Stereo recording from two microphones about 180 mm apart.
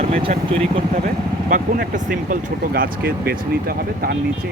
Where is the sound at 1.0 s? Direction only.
50° right (ahead or behind).